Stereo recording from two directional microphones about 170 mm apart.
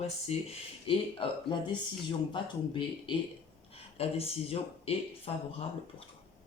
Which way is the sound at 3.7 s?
35° left (ahead or behind).